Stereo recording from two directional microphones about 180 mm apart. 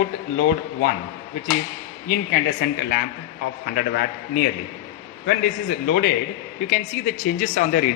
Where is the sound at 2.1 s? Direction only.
60° left (ahead or behind).